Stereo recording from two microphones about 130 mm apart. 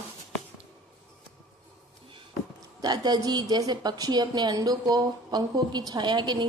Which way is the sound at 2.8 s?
30° right (ahead or behind).